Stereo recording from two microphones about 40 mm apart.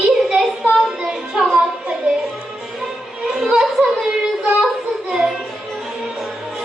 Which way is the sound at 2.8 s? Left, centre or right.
Centre.